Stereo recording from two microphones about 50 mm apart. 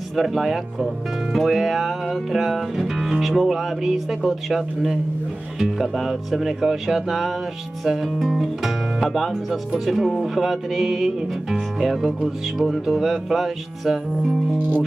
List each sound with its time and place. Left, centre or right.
0.1 s speech: centre